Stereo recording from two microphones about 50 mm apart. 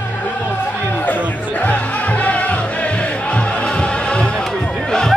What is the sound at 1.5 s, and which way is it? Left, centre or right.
Music, left.